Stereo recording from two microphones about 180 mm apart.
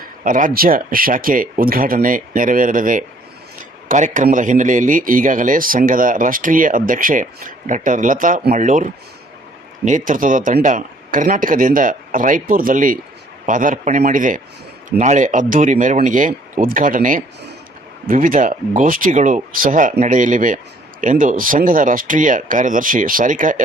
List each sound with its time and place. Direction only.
0.3 s a man's voice: 50° right (ahead or behind)